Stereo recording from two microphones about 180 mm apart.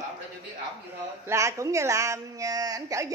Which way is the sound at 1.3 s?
15° right (ahead or behind).